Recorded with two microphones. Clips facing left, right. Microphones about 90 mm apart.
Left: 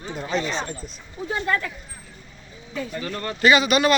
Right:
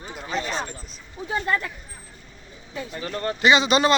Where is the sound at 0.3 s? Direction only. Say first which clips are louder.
Left 2 dB; 5° right (ahead or behind).